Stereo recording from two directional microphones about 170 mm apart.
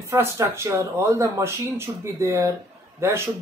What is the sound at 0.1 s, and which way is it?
A man's voice, 15° right (ahead or behind).